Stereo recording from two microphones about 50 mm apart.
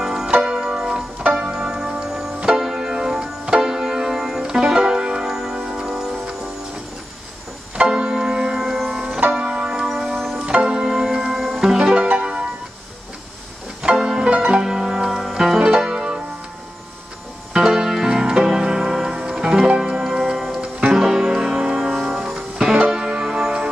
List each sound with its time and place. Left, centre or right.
0.0 s music: centre
7.7 s music: centre
9.8 s music: centre
10.4 s music: centre
12.0 s music: right
14.0 s music: centre
15.6 s music: centre
17.5 s music: centre